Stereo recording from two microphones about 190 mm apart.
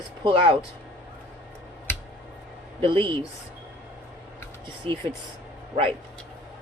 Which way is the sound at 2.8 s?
25° right (ahead or behind).